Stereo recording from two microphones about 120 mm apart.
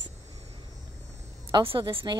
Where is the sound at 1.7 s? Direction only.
45° right (ahead or behind).